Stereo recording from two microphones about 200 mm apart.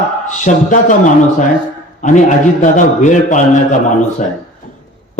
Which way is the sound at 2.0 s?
40° left (ahead or behind).